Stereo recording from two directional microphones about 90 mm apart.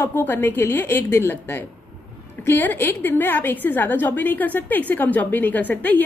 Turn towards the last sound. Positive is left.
turn(degrees=20)  # may be behind; listen again after turning